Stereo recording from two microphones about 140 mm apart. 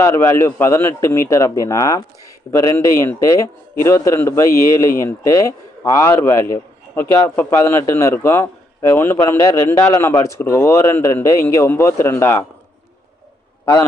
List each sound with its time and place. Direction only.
0.0 s a man's voice: 20° left (ahead or behind)